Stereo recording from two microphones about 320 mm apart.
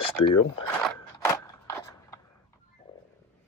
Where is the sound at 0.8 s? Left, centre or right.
Centre.